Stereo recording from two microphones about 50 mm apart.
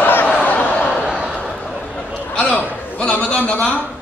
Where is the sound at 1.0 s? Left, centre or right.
Centre.